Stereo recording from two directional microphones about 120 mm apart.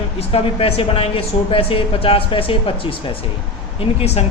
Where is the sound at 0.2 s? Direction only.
55° left (ahead or behind).